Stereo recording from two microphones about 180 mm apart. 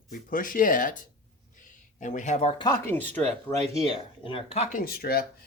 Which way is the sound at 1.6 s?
45° left (ahead or behind).